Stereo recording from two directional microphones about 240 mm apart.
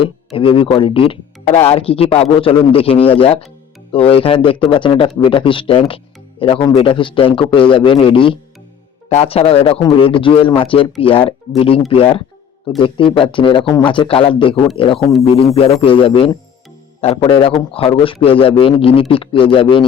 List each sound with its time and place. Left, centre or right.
0.3 s speech: left